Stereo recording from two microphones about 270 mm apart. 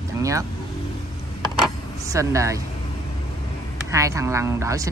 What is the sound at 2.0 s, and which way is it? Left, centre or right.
Speech, centre.